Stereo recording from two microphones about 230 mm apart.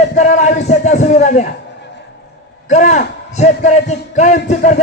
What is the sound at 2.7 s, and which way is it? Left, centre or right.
A man's voice, left.